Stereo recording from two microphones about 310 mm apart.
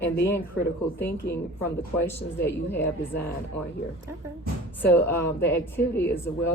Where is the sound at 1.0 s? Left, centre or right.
Centre.